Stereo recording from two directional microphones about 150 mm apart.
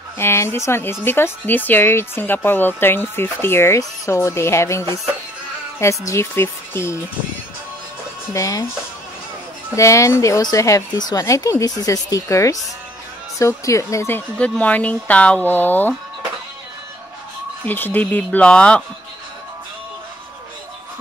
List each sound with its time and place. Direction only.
0.2 s speech: 15° left (ahead or behind)
8.3 s speech: 20° left (ahead or behind)
9.8 s speech: 20° left (ahead or behind)
17.6 s speech: 10° left (ahead or behind)